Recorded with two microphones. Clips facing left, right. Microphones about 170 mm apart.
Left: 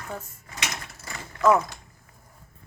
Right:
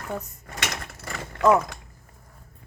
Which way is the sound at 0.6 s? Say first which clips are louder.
Right 3 dB; 65° right (ahead or behind).